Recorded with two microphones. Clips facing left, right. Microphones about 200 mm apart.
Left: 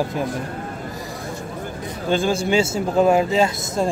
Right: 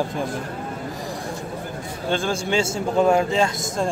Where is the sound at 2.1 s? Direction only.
5° left (ahead or behind).